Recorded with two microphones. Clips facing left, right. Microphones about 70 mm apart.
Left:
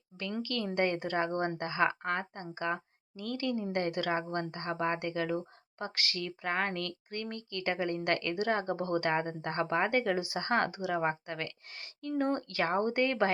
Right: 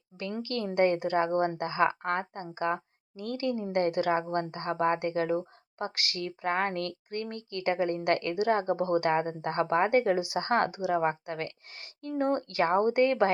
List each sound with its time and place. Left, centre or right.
0.4 s a woman's voice: right
0.9 s a woman's voice: right
4.3 s a woman's voice: right
10.8 s speech: centre
11.3 s a woman's voice: right